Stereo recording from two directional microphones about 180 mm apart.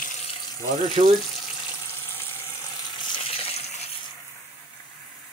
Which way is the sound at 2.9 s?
25° left (ahead or behind).